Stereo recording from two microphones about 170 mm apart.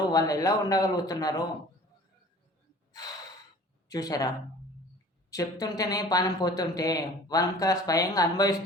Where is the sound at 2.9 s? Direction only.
20° left (ahead or behind).